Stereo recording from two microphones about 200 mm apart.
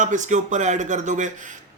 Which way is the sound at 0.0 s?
40° right (ahead or behind).